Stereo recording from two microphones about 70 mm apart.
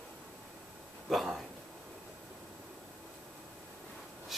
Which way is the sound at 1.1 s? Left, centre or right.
Centre.